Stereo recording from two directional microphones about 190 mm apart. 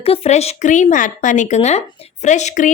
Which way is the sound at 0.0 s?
30° left (ahead or behind).